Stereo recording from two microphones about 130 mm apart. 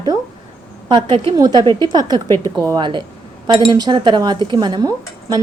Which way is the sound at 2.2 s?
20° left (ahead or behind).